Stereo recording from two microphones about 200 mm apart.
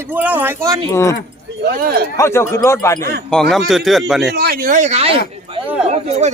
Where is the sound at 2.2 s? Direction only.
15° left (ahead or behind).